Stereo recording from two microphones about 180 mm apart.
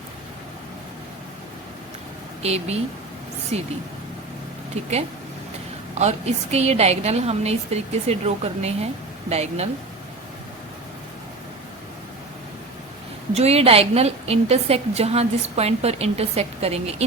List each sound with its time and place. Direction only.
2.4 s a woman's voice: 35° right (ahead or behind)
4.7 s a woman's voice: 35° right (ahead or behind)
13.3 s a woman's voice: 35° right (ahead or behind)